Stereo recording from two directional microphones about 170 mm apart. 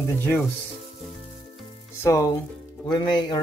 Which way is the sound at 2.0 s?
20° left (ahead or behind).